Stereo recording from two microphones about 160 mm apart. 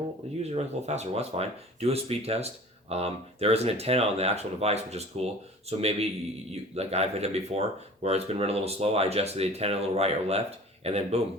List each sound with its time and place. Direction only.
0.4 s speech: 45° right (ahead or behind)